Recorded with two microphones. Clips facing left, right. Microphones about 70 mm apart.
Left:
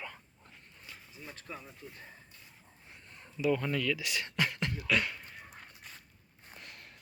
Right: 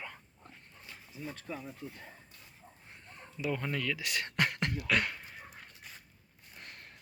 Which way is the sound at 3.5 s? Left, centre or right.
Centre.